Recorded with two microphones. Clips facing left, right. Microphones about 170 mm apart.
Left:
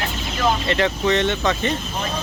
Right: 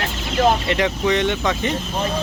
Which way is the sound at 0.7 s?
10° right (ahead or behind).